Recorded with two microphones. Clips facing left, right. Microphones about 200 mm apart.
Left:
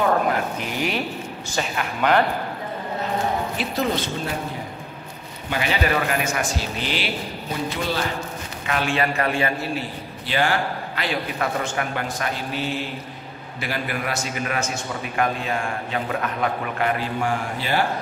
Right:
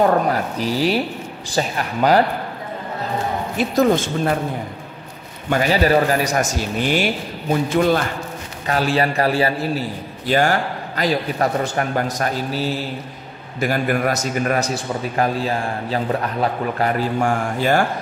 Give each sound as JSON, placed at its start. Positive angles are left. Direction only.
{"t": 0.0, "sound": "a man's voice", "side_deg": -35}
{"t": 3.5, "sound": "speech", "side_deg": -45}
{"t": 5.5, "sound": "speech", "side_deg": -40}
{"t": 8.6, "sound": "a man's voice", "side_deg": -35}